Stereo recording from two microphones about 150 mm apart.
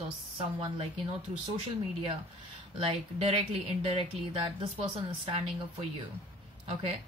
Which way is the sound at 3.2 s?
40° right (ahead or behind).